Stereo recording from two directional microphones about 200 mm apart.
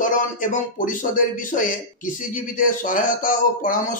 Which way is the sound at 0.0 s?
40° left (ahead or behind).